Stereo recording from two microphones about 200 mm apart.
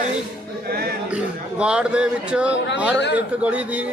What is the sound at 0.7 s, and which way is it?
Speech, 50° right (ahead or behind).